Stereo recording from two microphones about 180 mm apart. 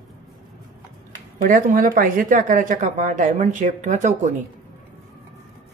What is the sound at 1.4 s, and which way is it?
Speech, 50° right (ahead or behind).